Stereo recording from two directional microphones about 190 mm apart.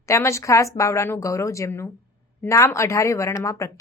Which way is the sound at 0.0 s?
15° left (ahead or behind).